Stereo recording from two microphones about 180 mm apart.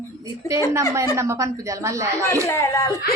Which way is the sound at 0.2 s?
20° right (ahead or behind).